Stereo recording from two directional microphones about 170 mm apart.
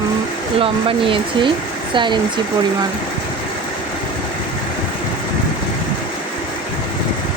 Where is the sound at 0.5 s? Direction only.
30° right (ahead or behind).